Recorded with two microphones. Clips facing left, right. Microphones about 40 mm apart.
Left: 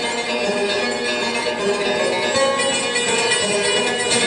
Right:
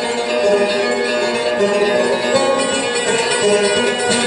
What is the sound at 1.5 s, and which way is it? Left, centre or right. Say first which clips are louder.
Music: right 7 dB; right.